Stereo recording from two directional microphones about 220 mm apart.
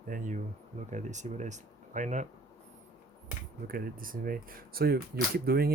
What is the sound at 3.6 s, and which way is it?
Speech, 40° right (ahead or behind).